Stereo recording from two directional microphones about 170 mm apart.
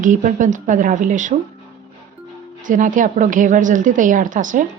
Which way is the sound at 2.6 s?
50° right (ahead or behind).